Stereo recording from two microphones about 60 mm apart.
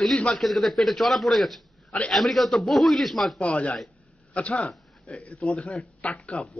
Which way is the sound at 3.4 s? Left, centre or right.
Centre.